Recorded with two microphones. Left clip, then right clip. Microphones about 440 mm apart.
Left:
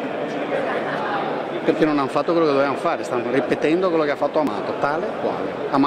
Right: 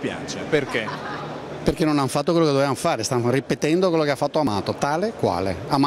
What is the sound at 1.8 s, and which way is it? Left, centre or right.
Speech, right.